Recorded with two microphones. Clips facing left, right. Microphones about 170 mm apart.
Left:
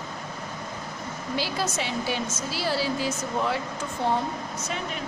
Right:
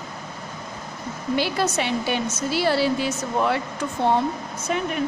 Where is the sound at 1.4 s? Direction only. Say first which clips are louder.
Right 5 dB; 60° right (ahead or behind).